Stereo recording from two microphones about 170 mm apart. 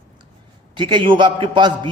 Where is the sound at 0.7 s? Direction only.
30° right (ahead or behind).